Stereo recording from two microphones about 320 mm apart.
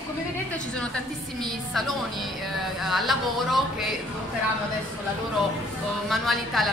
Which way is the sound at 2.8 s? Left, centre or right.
Centre.